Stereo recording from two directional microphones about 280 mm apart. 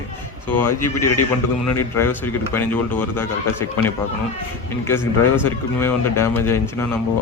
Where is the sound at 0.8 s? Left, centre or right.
Centre.